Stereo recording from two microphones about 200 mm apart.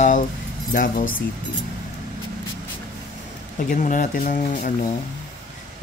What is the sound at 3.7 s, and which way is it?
Speech, 40° left (ahead or behind).